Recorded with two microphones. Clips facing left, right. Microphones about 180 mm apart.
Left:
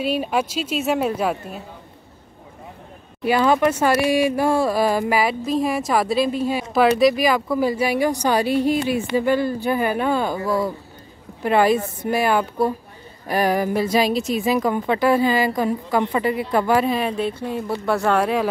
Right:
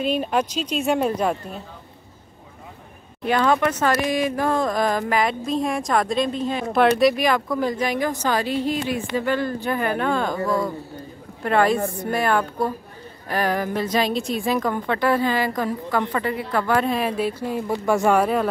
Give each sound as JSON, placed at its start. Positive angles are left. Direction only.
{"t": 0.0, "sound": "speech", "side_deg": 5}
{"t": 3.3, "sound": "speech", "side_deg": 10}
{"t": 16.8, "sound": "speech", "side_deg": 0}
{"t": 17.6, "sound": "speech", "side_deg": -15}